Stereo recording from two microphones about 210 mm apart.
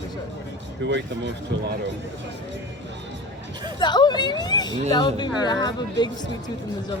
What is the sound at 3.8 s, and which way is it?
A man's voice, 20° left (ahead or behind).